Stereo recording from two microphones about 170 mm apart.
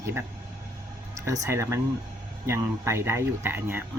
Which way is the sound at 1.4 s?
15° right (ahead or behind).